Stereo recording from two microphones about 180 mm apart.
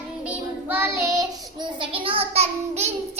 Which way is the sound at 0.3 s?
10° right (ahead or behind).